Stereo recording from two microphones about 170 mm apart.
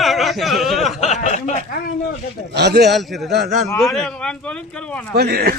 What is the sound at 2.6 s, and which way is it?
Speech, 75° right (ahead or behind).